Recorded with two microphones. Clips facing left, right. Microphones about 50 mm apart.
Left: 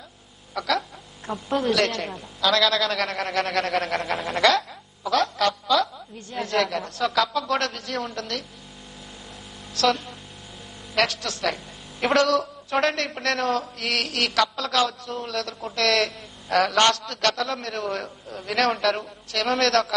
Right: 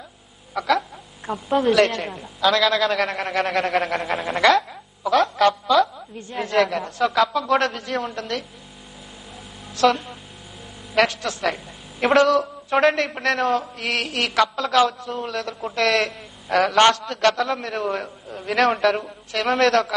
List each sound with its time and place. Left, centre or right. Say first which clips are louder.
0.6 s a sound: right 4 dB; centre
1.8 s a man's voice: right 5 dB; centre
2.0 s a man's voice: right 3 dB; centre
6.5 s a man's voice: right 4 dB; centre
9.8 s a man's voice: right 4 dB; right
11.4 s a man's voice: right 1 dB; centre